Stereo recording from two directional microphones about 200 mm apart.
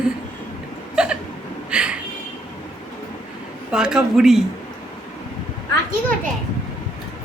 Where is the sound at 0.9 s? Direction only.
5° right (ahead or behind).